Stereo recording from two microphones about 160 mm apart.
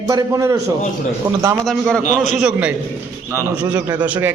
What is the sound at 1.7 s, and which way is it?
A man's voice, 5° left (ahead or behind).